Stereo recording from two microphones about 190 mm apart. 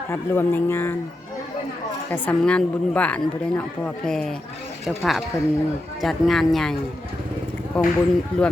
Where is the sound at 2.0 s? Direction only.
10° left (ahead or behind).